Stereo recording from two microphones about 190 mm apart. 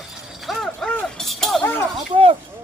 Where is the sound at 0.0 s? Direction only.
Centre (ahead or behind).